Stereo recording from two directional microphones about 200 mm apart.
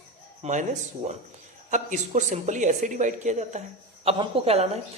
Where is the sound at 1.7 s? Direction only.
35° right (ahead or behind).